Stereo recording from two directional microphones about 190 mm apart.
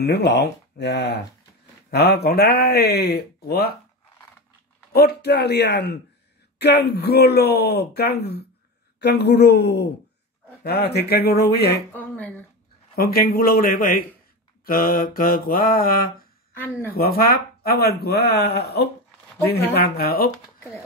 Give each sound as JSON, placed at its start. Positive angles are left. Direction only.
{"t": 0.0, "sound": "speech", "side_deg": 60}
{"t": 4.9, "sound": "speech", "side_deg": 55}
{"t": 11.9, "sound": "speech", "side_deg": 10}
{"t": 12.9, "sound": "mantra", "side_deg": 50}
{"t": 16.5, "sound": "speech", "side_deg": 10}
{"t": 16.9, "sound": "speech", "side_deg": 55}